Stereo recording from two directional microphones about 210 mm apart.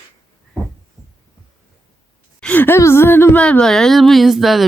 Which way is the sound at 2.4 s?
5° left (ahead or behind).